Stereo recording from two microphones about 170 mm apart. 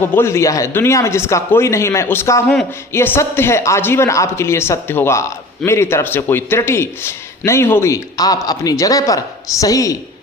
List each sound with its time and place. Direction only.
0.0 s a man's voice: 15° left (ahead or behind)